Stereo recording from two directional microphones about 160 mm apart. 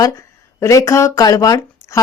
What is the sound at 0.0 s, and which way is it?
Speech, 20° left (ahead or behind).